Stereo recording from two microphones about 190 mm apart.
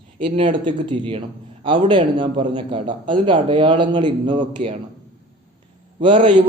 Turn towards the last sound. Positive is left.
turn(degrees=-25)  # may be behind; listen again after turning